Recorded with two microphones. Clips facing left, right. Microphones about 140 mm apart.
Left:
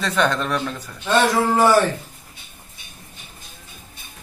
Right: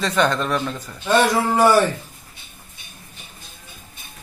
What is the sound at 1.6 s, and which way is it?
Speech, 15° right (ahead or behind).